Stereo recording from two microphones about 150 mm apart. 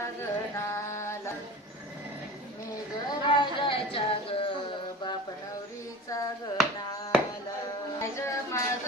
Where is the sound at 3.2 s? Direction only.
30° left (ahead or behind).